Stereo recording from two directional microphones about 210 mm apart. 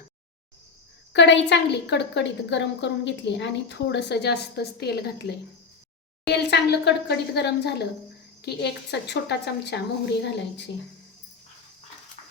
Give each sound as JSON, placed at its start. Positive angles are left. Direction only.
{"t": 1.1, "sound": "a woman's voice", "side_deg": 55}
{"t": 6.2, "sound": "a woman's voice", "side_deg": 50}